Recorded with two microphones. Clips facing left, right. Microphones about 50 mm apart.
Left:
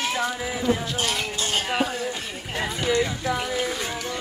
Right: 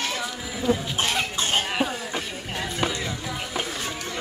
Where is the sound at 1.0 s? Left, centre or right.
Right.